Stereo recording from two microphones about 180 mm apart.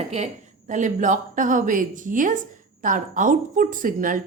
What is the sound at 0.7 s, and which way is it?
A woman's voice, 45° right (ahead or behind).